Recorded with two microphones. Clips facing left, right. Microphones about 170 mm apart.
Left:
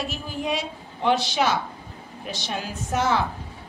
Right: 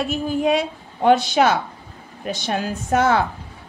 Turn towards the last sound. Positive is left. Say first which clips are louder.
# right 6 dB
turn(degrees=-55)  # may be behind; listen again after turning